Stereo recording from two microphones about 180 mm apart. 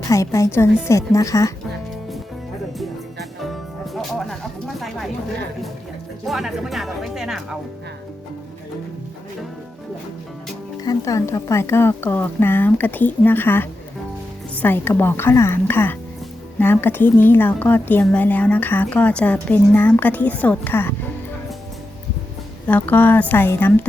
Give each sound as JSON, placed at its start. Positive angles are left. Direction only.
{"t": 0.0, "sound": "a woman's voice", "side_deg": 15}
{"t": 2.7, "sound": "music", "side_deg": 0}
{"t": 6.2, "sound": "speech", "side_deg": 0}
{"t": 10.8, "sound": "a woman's voice", "side_deg": 15}
{"t": 22.6, "sound": "a woman's voice", "side_deg": 10}